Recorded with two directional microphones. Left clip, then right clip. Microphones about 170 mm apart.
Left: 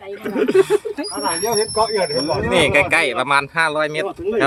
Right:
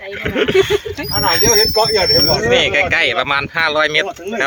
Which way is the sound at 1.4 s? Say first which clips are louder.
Right 4 dB; 30° right (ahead or behind).